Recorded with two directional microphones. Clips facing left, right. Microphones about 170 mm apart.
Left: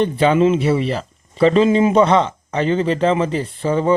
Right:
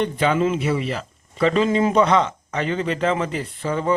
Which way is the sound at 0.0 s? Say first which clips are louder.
Left 5 dB; 30° left (ahead or behind).